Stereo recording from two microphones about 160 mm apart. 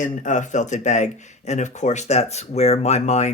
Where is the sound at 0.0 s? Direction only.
50° left (ahead or behind).